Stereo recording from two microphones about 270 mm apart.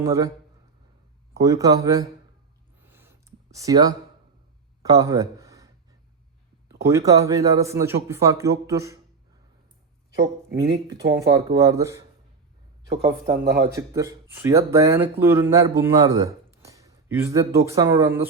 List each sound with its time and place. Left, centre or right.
0.0 s speech: centre
1.3 s speech: centre
2.8 s a sound: centre
6.7 s speech: centre
10.5 s speech: centre
13.4 s speech: right
13.7 s speech: centre